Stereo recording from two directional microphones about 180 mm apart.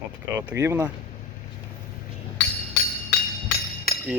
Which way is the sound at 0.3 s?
15° right (ahead or behind).